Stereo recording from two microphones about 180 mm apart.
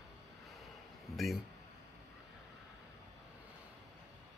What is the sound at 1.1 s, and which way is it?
Speech, centre (ahead or behind).